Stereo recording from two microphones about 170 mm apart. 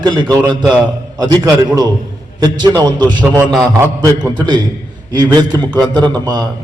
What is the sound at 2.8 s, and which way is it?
A man's voice, 25° right (ahead or behind).